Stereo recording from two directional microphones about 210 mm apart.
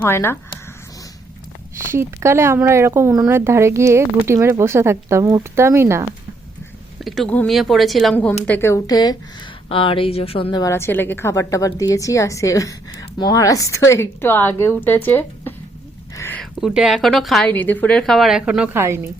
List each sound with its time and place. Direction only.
0.0 s speech: 10° left (ahead or behind)
1.9 s speech: 10° right (ahead or behind)
7.0 s a woman's voice: 5° left (ahead or behind)